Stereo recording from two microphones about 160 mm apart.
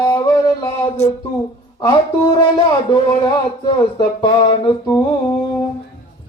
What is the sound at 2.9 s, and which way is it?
Speech, 25° left (ahead or behind).